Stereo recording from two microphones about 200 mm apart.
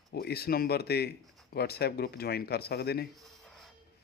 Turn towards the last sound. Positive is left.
turn(degrees=0)  # may be behind; listen again after turning